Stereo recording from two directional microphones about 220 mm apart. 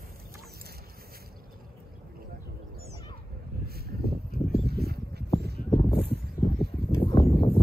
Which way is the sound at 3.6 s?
45° right (ahead or behind).